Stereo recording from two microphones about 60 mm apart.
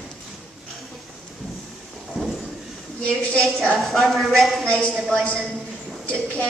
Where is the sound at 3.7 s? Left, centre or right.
Centre.